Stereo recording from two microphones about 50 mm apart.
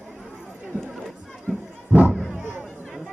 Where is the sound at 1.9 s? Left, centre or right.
Right.